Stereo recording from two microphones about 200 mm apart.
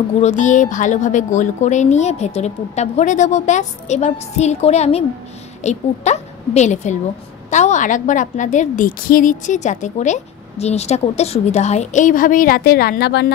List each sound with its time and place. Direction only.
0.2 s a woman's voice: 35° left (ahead or behind); by 13.3 s 55° left (ahead or behind)